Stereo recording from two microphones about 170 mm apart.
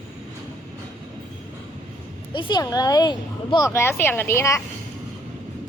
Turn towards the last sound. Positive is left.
turn(degrees=15)  # may be behind; listen again after turning